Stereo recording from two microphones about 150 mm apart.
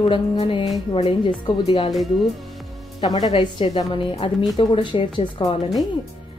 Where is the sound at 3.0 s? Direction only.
25° left (ahead or behind).